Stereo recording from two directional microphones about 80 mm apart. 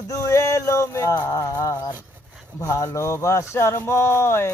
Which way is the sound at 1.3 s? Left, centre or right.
Left.